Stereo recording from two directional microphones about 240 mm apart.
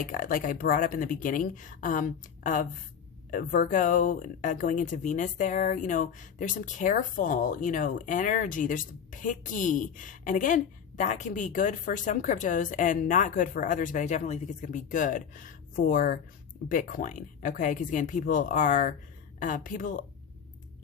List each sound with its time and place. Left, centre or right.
0.0 s speech: left